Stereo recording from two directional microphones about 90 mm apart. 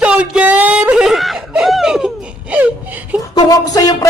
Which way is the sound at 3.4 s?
45° left (ahead or behind).